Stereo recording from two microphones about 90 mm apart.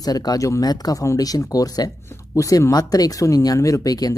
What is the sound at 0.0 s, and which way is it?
Speech, 45° left (ahead or behind).